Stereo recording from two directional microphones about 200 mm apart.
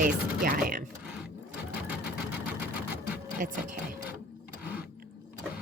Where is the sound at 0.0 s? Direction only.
45° right (ahead or behind).